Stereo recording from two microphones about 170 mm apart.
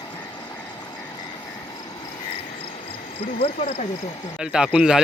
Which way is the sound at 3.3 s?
40° left (ahead or behind).